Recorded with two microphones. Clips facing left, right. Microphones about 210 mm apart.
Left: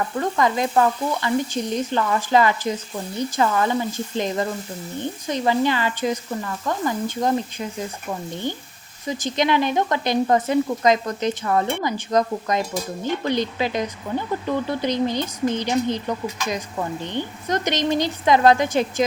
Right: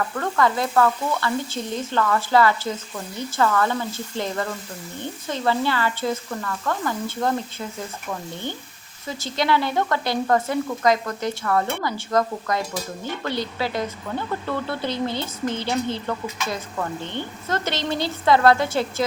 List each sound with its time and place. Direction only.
0.2 s speech: 15° left (ahead or behind)